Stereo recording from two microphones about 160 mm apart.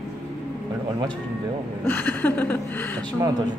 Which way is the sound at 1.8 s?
10° left (ahead or behind).